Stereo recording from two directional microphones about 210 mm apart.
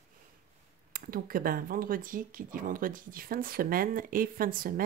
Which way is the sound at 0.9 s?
40° right (ahead or behind).